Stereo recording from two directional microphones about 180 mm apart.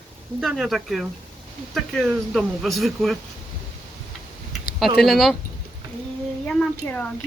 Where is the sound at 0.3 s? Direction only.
Centre (ahead or behind).